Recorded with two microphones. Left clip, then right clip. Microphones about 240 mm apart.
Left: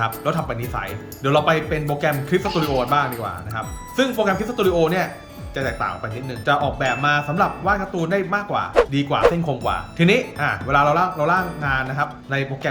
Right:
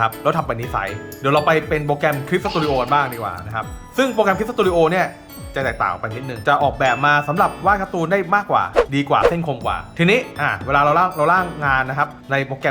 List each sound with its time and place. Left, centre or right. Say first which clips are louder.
0.0 s speech: right 4 dB; centre